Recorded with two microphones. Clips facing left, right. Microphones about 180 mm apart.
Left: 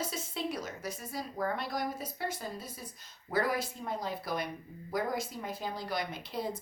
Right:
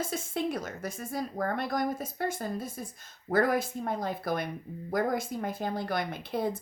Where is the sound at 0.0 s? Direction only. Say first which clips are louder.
Right 5 dB; 50° right (ahead or behind).